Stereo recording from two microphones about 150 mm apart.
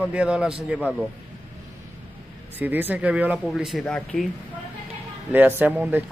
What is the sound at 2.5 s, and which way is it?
A man's voice, 10° right (ahead or behind).